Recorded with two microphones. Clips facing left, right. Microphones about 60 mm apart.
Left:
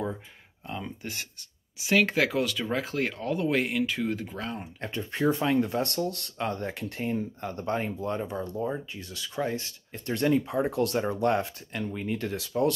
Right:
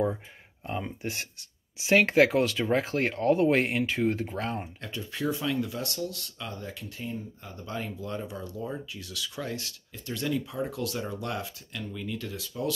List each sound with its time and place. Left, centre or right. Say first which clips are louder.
0.7 s speech: right 3 dB; right
4.8 s speech: left 6 dB; left
7.7 s speech: left 3 dB; left
9.9 s speech: left 6 dB; left
12.4 s speech: left 7 dB; left